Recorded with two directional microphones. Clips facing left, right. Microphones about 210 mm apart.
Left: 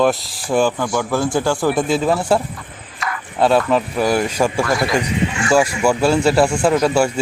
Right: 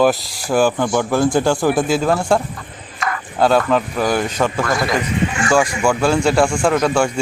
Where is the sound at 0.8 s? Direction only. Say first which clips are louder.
Right 3 dB; 20° right (ahead or behind).